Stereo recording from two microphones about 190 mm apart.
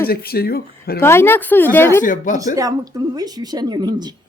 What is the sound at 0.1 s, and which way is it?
Speech, 55° left (ahead or behind).